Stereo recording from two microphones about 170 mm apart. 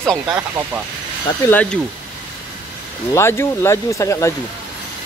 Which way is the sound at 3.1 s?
15° left (ahead or behind).